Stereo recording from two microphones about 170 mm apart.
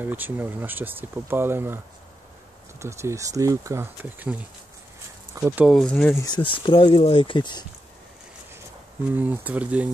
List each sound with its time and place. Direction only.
0.0 s speech: 10° right (ahead or behind)
2.8 s speech: 15° right (ahead or behind)
5.7 s speech: 5° left (ahead or behind)
6.1 s speech: 25° left (ahead or behind)
9.1 s speech: 10° right (ahead or behind)